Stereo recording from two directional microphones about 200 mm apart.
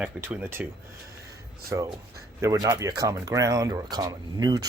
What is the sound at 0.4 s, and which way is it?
Speech, 10° right (ahead or behind).